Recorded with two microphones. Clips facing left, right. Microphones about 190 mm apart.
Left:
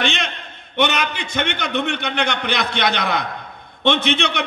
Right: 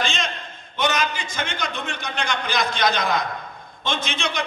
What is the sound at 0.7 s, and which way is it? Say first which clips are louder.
A man's voice: left 3 dB; 65° left (ahead or behind).